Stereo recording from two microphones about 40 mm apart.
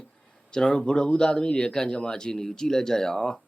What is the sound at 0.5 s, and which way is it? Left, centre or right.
Speech, centre.